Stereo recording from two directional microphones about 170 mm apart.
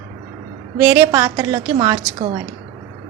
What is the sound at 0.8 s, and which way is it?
A woman's voice, 15° right (ahead or behind).